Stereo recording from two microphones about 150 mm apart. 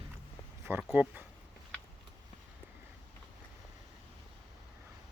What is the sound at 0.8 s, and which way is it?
Speech, 10° right (ahead or behind).